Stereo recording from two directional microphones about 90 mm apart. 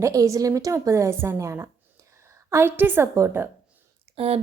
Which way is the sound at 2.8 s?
25° right (ahead or behind).